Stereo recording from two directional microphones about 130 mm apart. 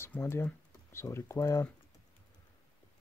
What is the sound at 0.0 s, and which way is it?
Speech, 20° left (ahead or behind).